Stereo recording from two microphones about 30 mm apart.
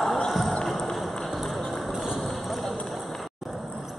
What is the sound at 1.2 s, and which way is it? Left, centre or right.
Music, centre.